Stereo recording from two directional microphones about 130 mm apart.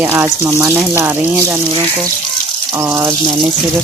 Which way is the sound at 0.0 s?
15° right (ahead or behind).